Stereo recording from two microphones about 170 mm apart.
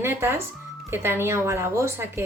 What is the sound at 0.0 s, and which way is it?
A woman's voice, 15° right (ahead or behind).